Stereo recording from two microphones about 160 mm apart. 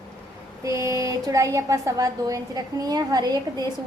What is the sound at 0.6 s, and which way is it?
Speech, 20° right (ahead or behind).